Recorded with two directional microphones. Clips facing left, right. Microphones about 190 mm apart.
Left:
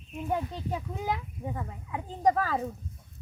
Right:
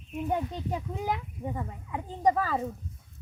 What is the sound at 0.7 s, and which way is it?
Speech, 15° right (ahead or behind).